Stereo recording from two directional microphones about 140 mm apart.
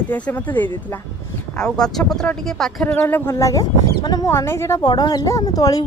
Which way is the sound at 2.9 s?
15° left (ahead or behind).